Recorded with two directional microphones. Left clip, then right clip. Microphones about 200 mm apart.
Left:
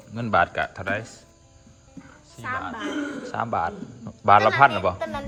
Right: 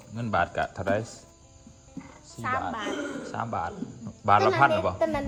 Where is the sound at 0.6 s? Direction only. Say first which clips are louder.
Left 1 dB; 20° right (ahead or behind).